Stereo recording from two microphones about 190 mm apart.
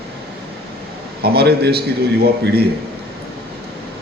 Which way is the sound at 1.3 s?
55° right (ahead or behind).